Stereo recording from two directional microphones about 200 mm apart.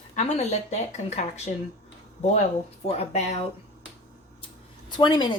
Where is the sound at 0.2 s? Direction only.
35° left (ahead or behind).